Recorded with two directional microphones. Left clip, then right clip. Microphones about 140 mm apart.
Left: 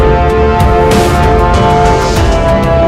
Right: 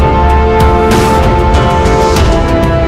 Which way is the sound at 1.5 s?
Centre (ahead or behind).